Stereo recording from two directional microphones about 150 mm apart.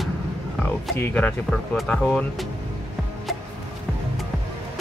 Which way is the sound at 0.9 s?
10° left (ahead or behind).